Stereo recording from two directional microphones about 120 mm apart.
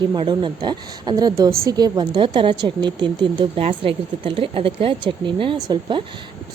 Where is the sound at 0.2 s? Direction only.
40° right (ahead or behind).